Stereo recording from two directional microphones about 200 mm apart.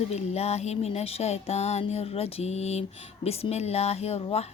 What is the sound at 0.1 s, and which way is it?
A woman's voice, 30° left (ahead or behind).